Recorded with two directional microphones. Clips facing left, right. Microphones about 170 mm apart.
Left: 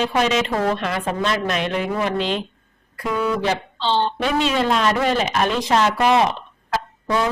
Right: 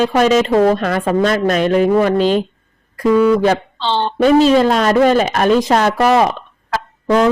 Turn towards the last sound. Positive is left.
turn(degrees=-70)  # may be behind; listen again after turning